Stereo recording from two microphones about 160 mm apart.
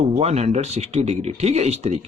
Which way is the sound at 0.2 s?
40° right (ahead or behind).